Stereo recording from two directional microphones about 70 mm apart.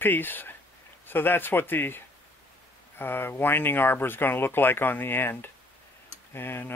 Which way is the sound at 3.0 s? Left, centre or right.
Left.